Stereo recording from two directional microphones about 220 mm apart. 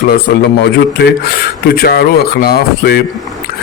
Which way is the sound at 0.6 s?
50° left (ahead or behind).